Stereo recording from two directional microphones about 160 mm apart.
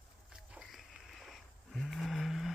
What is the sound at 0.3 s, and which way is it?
Wild animals, centre (ahead or behind).